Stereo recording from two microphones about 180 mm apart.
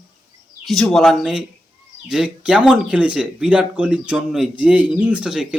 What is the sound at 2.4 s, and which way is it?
Speech, 5° right (ahead or behind).